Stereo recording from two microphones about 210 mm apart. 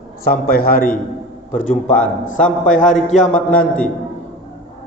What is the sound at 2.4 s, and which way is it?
A man's voice, 35° left (ahead or behind).